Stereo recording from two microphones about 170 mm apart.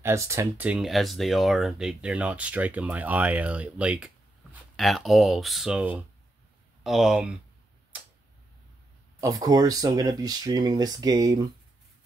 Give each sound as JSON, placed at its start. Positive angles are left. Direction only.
{"t": 0.0, "sound": "speech", "side_deg": -15}
{"t": 9.2, "sound": "speech", "side_deg": -20}